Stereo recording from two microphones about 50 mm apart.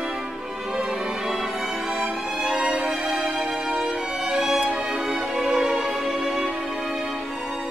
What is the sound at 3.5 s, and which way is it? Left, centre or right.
Music, centre.